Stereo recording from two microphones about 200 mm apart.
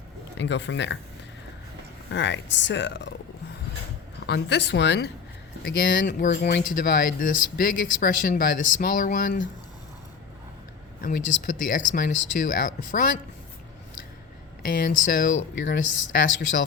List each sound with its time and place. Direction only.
0.3 s speech: 60° left (ahead or behind)
2.1 s speech: 60° left (ahead or behind)
4.3 s speech: 60° left (ahead or behind)
5.6 s speech: 45° left (ahead or behind)
11.0 s speech: 40° left (ahead or behind)
14.6 s speech: 45° left (ahead or behind)